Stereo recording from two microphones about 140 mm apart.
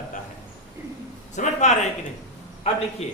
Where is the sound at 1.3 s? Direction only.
60° left (ahead or behind).